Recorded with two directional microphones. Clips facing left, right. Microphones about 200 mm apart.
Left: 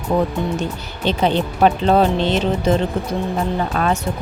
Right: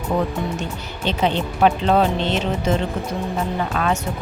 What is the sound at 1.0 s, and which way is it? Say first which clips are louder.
Speech: left 3 dB; 35° left (ahead or behind).